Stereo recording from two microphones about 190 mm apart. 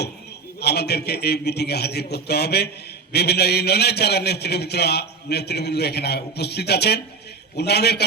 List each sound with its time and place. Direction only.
0.6 s a man's voice: 60° left (ahead or behind)